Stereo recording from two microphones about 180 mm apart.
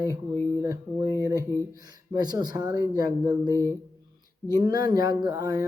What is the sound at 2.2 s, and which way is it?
Speech, 20° right (ahead or behind).